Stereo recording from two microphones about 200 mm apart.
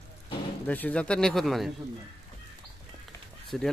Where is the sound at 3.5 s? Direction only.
Centre (ahead or behind).